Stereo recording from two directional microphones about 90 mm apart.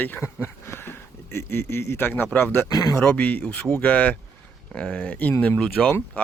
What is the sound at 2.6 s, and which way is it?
Speech, 40° left (ahead or behind).